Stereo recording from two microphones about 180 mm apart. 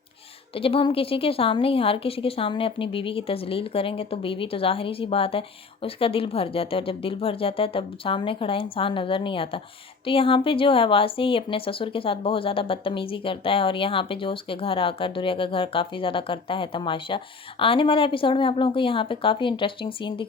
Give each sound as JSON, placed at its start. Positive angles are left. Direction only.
{"t": 0.5, "sound": "a woman's voice", "side_deg": 30}